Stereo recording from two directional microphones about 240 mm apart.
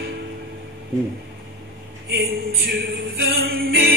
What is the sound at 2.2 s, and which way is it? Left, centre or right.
Speech, right.